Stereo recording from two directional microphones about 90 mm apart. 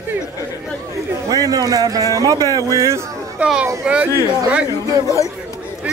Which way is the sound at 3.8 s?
10° right (ahead or behind).